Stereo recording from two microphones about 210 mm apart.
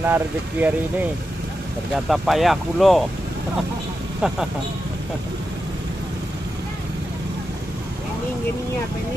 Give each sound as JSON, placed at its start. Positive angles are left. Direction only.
{"t": 0.0, "sound": "speech", "side_deg": -10}
{"t": 2.0, "sound": "speech", "side_deg": 0}